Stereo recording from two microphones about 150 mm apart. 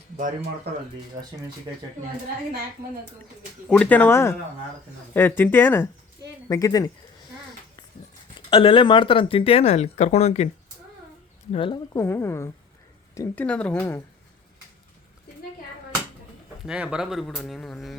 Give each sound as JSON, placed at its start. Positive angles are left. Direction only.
{"t": 0.2, "sound": "speech", "side_deg": -60}
{"t": 3.7, "sound": "speech", "side_deg": 10}
{"t": 8.4, "sound": "speech", "side_deg": 35}
{"t": 11.5, "sound": "speech", "side_deg": 35}
{"t": 11.9, "sound": "speech", "side_deg": 15}
{"t": 13.7, "sound": "speech", "side_deg": 20}
{"t": 16.6, "sound": "a man's voice", "side_deg": -5}